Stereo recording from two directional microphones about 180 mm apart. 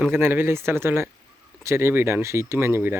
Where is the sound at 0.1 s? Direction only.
10° right (ahead or behind).